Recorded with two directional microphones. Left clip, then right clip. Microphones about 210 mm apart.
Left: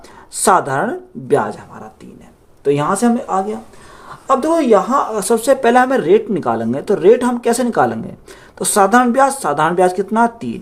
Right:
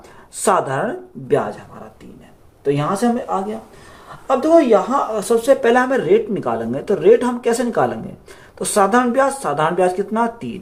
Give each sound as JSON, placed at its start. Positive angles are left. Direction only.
{"t": 0.4, "sound": "speech", "side_deg": 45}
{"t": 2.6, "sound": "speech", "side_deg": 55}
{"t": 4.3, "sound": "speech", "side_deg": 50}